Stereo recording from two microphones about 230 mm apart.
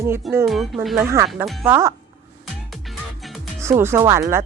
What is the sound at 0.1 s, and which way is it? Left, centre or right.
Speech, centre.